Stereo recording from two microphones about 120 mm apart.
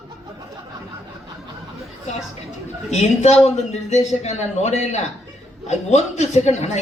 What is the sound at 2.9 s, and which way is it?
A man's voice, 70° left (ahead or behind).